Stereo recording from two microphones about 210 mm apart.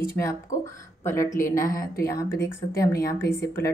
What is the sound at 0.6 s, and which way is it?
Speech, 15° left (ahead or behind).